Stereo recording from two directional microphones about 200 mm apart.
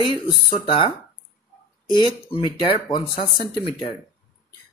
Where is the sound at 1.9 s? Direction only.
25° left (ahead or behind).